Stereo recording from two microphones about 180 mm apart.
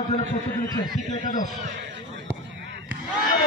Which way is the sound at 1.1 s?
45° left (ahead or behind).